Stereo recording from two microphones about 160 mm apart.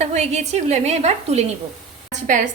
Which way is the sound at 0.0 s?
45° right (ahead or behind).